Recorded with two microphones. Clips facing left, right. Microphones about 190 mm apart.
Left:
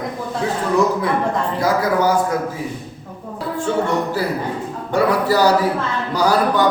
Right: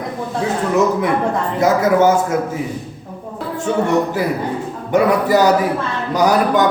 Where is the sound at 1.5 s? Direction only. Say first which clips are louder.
Right 6 dB; 25° right (ahead or behind).